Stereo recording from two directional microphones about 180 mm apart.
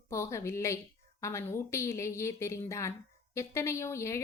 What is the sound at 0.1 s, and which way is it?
A woman's voice, 15° left (ahead or behind).